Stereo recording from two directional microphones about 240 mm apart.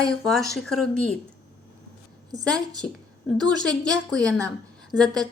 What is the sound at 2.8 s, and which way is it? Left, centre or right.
A woman's voice, centre.